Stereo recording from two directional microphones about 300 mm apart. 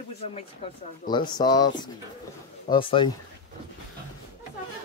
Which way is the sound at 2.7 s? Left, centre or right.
Centre.